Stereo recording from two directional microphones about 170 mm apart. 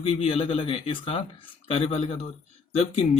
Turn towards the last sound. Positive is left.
turn(degrees=35)  # may be behind; listen again after turning